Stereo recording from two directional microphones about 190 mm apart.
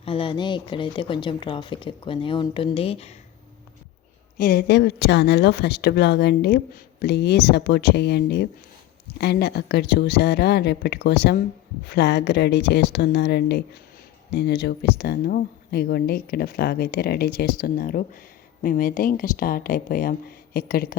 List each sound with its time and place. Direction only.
0.0 s speech: 30° left (ahead or behind)
4.4 s speech: 55° left (ahead or behind)